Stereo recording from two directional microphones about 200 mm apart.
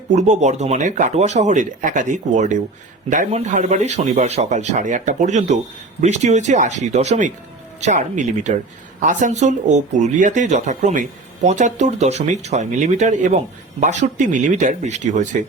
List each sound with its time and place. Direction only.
0.2 s speech: 35° right (ahead or behind)